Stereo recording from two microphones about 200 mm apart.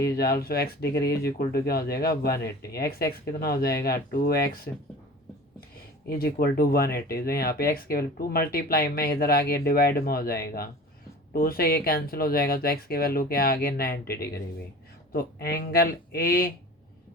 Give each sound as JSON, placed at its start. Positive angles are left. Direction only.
{"t": 0.2, "sound": "speech", "side_deg": 50}
{"t": 6.1, "sound": "speech", "side_deg": 50}